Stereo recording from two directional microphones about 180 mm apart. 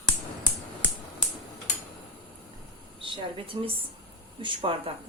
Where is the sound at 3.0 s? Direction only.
30° right (ahead or behind).